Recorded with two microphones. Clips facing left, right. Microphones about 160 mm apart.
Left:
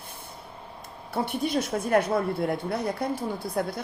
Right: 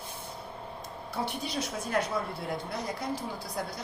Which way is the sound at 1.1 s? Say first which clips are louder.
Left 7 dB; 55° left (ahead or behind).